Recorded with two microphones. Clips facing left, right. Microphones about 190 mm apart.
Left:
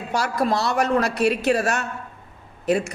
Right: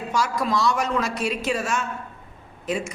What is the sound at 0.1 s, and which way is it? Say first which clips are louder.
Speech: left 2 dB; 60° left (ahead or behind).